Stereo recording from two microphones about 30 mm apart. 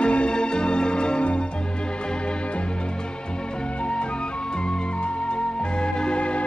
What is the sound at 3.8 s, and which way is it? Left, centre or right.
Music, left.